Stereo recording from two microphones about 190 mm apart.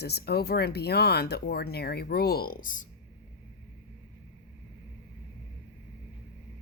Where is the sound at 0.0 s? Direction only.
55° left (ahead or behind).